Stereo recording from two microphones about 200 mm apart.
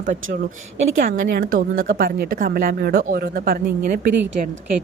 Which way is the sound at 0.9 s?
45° right (ahead or behind).